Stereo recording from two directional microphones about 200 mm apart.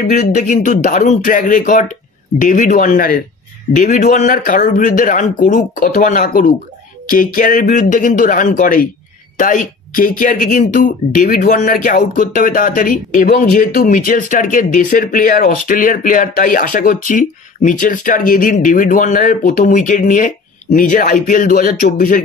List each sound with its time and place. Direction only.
0.0 s speech: 45° left (ahead or behind)